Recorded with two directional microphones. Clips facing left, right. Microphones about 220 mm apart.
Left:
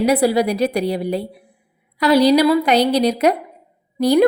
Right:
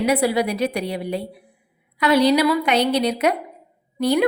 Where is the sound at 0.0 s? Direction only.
35° left (ahead or behind).